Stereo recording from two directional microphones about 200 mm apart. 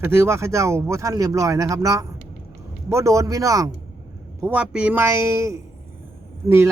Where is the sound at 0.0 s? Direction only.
15° right (ahead or behind).